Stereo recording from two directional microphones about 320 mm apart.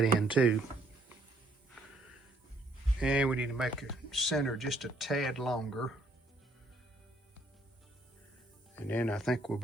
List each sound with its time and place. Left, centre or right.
0.0 s speech: centre
3.0 s speech: centre
8.7 s speech: centre